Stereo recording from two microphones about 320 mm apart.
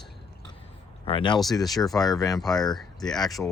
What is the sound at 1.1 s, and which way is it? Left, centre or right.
Speech, centre.